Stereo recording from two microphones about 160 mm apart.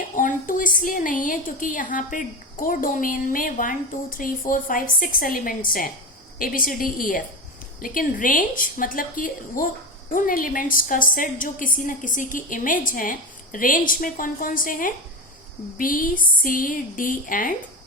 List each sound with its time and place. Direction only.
0.2 s a woman's voice: 55° left (ahead or behind)